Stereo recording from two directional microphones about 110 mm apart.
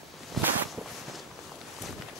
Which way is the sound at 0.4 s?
Centre (ahead or behind).